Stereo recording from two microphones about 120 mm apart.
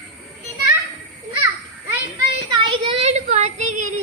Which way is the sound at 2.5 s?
40° right (ahead or behind).